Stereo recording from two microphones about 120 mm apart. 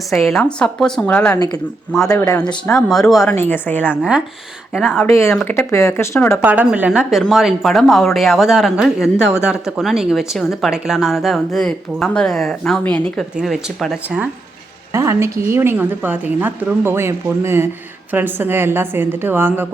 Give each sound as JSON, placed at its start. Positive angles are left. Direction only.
{"t": 0.1, "sound": "a woman's voice", "side_deg": 0}
{"t": 2.1, "sound": "speech", "side_deg": 25}
{"t": 2.9, "sound": "speech", "side_deg": 0}
{"t": 3.2, "sound": "a woman's voice", "side_deg": 15}
{"t": 4.7, "sound": "speech", "side_deg": -5}
{"t": 5.0, "sound": "speech", "side_deg": 25}
{"t": 6.4, "sound": "speech", "side_deg": -15}
{"t": 13.3, "sound": "speech", "side_deg": -5}
{"t": 14.9, "sound": "a woman's voice", "side_deg": -25}